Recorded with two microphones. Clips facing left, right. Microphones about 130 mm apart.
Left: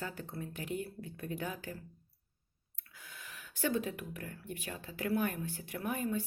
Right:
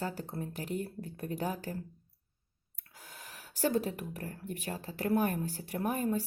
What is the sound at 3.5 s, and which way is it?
A woman's voice, 40° right (ahead or behind).